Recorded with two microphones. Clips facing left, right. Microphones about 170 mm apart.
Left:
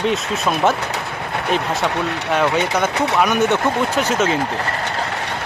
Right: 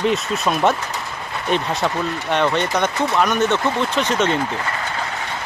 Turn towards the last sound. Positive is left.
turn(degrees=5)  # may be behind; listen again after turning